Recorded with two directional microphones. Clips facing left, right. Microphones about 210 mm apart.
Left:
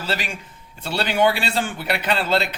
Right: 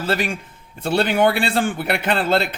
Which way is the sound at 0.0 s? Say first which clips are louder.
Right 5 dB; 55° right (ahead or behind).